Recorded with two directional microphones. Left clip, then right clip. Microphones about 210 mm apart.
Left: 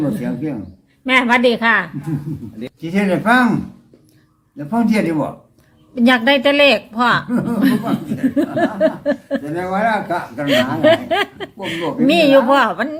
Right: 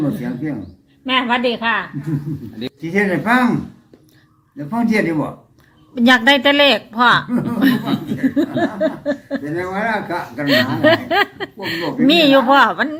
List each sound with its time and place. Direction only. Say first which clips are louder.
0.2 s speech: left 1 dB; 5° left (ahead or behind)
1.0 s a woman's voice: left 4 dB; 25° left (ahead or behind)
2.6 s speech: right 1 dB; 5° left (ahead or behind)
4.7 s a woman's voice: even; 5° left (ahead or behind)